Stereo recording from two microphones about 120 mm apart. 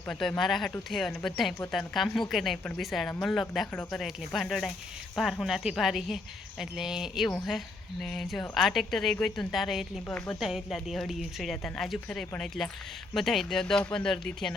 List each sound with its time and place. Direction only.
0.1 s speech: 5° left (ahead or behind)
10.1 s speech: 10° left (ahead or behind)
10.4 s speech: 5° right (ahead or behind)